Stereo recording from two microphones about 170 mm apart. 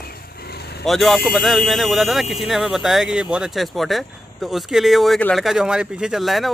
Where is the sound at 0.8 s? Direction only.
Centre (ahead or behind).